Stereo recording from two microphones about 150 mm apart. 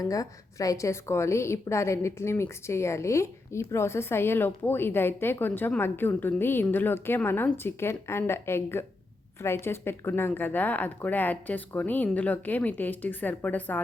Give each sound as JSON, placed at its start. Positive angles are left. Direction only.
{"t": 0.0, "sound": "a woman's voice", "side_deg": 25}